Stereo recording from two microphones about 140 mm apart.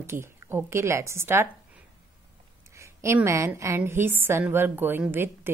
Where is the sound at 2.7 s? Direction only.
20° right (ahead or behind).